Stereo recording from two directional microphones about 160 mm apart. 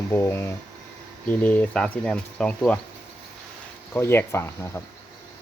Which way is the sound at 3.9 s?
15° left (ahead or behind).